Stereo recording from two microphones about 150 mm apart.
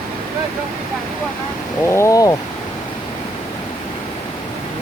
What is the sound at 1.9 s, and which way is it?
Speech, 20° left (ahead or behind).